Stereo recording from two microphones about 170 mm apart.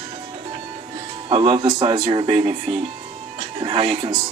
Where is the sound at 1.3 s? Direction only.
35° right (ahead or behind).